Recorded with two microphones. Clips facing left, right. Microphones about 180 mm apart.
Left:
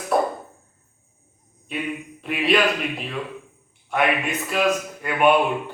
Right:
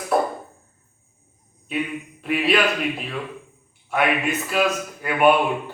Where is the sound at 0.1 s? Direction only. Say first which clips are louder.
Even; centre (ahead or behind).